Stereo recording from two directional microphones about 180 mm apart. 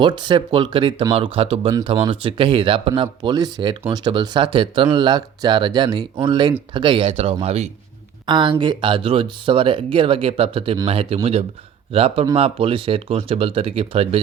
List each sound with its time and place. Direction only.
0.0 s speech: 25° right (ahead or behind)
8.3 s speech: 25° right (ahead or behind)